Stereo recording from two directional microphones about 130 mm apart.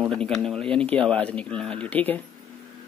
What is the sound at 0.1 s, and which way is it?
Speech, 5° left (ahead or behind).